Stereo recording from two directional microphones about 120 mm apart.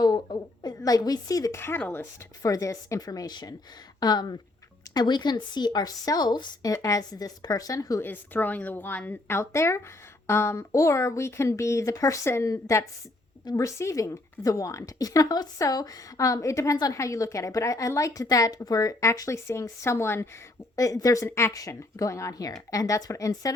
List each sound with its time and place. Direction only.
0.0 s a sound: 35° left (ahead or behind)
1.8 s speech: 15° left (ahead or behind)
2.4 s a woman's voice: 30° left (ahead or behind)
8.0 s a woman's voice: 15° left (ahead or behind)
13.4 s a woman's voice: 35° left (ahead or behind)
13.7 s a woman's voice: 25° left (ahead or behind)